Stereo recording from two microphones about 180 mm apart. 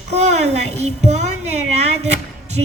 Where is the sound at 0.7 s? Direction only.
40° right (ahead or behind).